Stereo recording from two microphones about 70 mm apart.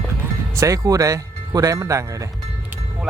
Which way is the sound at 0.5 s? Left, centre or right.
Right.